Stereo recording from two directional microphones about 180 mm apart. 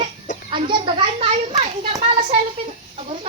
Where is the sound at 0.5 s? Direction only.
25° right (ahead or behind).